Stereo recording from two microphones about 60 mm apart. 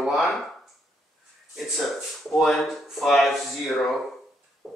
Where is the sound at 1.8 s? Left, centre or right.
Centre.